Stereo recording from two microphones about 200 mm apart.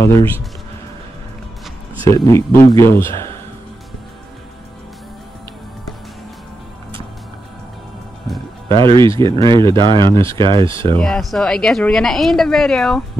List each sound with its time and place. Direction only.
0.0 s speech: 15° left (ahead or behind)
2.0 s speech: 15° left (ahead or behind)
8.7 s speech: 25° right (ahead or behind)
11.0 s a woman's voice: centre (ahead or behind)